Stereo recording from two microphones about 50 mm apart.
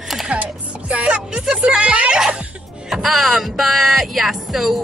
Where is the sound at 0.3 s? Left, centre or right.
Right.